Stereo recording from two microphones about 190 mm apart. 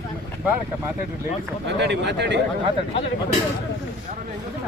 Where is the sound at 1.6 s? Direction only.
65° right (ahead or behind).